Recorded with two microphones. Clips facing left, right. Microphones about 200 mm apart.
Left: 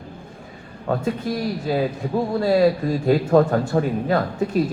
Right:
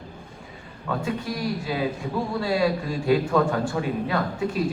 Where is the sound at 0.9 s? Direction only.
40° left (ahead or behind).